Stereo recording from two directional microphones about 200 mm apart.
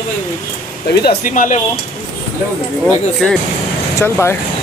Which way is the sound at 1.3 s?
40° left (ahead or behind).